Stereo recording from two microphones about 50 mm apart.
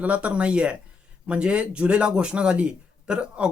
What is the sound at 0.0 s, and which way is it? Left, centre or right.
A man's voice, right.